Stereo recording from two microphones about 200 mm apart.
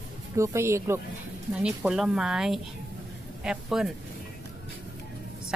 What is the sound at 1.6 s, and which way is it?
Speech, 5° right (ahead or behind).